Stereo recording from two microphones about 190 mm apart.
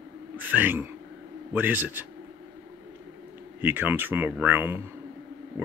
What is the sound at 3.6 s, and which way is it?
Speech, 10° right (ahead or behind).